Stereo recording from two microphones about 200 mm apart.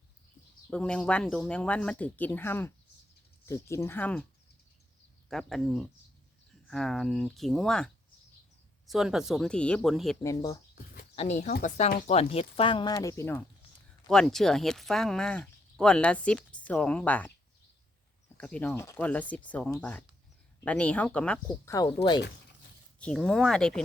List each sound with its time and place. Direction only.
0.7 s speech: 5° left (ahead or behind)
5.3 s speech: centre (ahead or behind)
8.9 s speech: centre (ahead or behind)
10.2 s speech: 15° left (ahead or behind)
11.1 s speech: 30° left (ahead or behind); by 13.4 s 10° left (ahead or behind)
14.1 s speech: centre (ahead or behind)
18.3 s speech: 5° left (ahead or behind)
21.8 s speech: 25° left (ahead or behind)
23.0 s speech: 5° left (ahead or behind)